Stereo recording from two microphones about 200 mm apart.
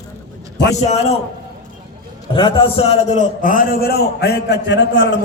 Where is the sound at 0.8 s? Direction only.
35° left (ahead or behind).